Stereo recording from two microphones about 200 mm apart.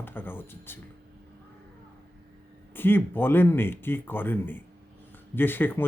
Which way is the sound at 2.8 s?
10° left (ahead or behind).